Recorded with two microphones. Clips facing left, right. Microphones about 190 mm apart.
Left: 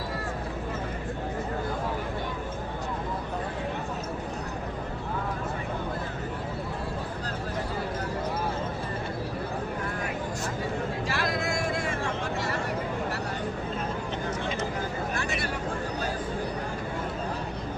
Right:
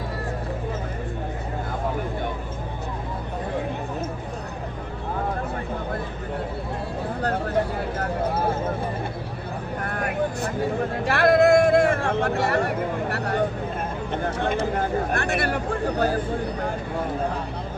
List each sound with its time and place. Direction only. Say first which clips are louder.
9.8 s vehicle: right 6 dB; 60° right (ahead or behind)
11.0 s a sound: right 17 dB; 60° right (ahead or behind)
14.1 s vehicle: right 6 dB; 55° right (ahead or behind)